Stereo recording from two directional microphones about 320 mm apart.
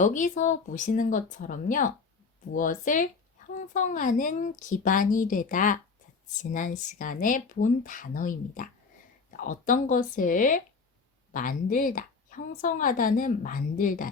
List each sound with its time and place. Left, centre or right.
0.0 s speech: left